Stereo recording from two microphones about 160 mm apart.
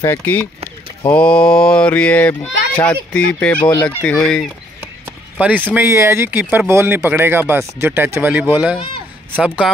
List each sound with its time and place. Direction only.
0.0 s speech: 15° left (ahead or behind)
5.4 s speech: 10° right (ahead or behind)